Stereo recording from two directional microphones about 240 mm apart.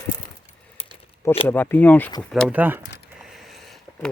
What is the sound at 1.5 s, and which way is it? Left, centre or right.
Speech, centre.